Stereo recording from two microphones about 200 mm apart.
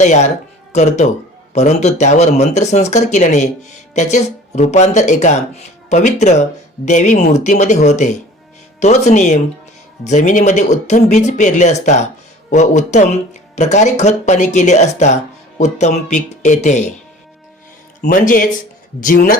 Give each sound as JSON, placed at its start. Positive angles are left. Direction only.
{"t": 0.0, "sound": "speech", "side_deg": 35}
{"t": 18.0, "sound": "speech", "side_deg": 40}